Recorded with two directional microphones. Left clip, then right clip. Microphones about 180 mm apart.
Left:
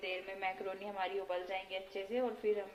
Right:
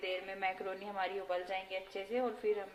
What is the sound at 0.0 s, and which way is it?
Speech, 5° right (ahead or behind).